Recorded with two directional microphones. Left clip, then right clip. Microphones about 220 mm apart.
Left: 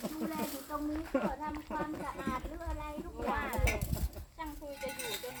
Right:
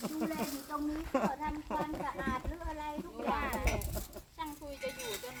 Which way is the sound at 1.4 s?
45° right (ahead or behind).